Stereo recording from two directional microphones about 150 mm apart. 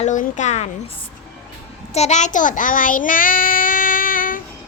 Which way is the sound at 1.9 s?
50° left (ahead or behind).